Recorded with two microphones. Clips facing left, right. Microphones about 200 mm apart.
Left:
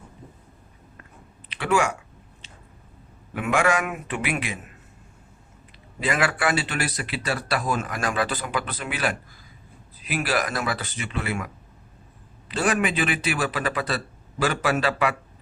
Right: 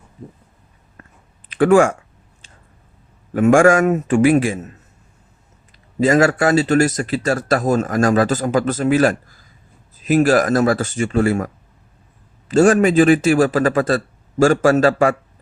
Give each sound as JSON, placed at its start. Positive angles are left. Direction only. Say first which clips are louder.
{"t": 1.5, "sound": "speech", "louder": "right 11 dB", "side_deg": -50}
{"t": 3.3, "sound": "speech", "louder": "right 11 dB", "side_deg": -45}
{"t": 6.0, "sound": "speech", "louder": "right 10 dB", "side_deg": -45}